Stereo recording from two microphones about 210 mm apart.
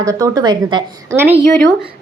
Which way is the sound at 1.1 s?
10° right (ahead or behind).